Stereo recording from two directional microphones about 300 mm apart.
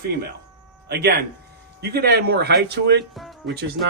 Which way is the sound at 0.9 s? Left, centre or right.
Right.